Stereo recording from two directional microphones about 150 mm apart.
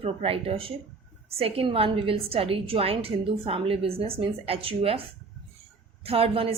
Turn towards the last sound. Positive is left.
turn(degrees=-40)  # may be behind; listen again after turning